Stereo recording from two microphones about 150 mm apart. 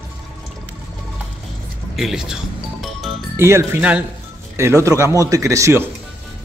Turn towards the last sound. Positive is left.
turn(degrees=-20)  # may be behind; listen again after turning